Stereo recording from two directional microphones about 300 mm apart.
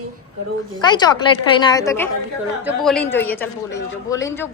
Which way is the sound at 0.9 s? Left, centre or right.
Centre.